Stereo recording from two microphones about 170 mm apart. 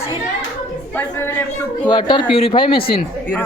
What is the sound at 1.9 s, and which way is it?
Speech, 25° left (ahead or behind).